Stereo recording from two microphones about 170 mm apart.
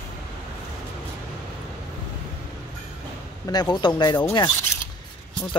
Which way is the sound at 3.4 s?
25° left (ahead or behind).